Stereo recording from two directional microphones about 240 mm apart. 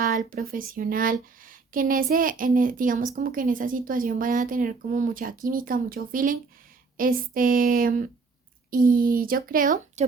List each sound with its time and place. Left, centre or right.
0.0 s speech: right